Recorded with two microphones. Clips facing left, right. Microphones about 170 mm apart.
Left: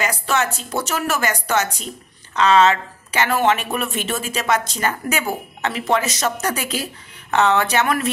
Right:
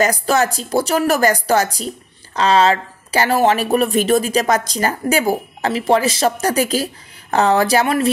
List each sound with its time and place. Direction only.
0.0 s speech: 40° right (ahead or behind)